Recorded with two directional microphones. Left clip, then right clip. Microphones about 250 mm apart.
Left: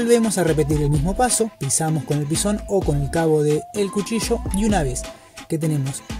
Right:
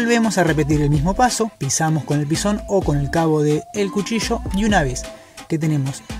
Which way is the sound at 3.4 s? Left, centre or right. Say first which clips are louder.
Right 1 dB; centre.